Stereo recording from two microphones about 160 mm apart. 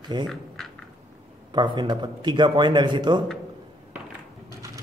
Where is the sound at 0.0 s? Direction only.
25° right (ahead or behind).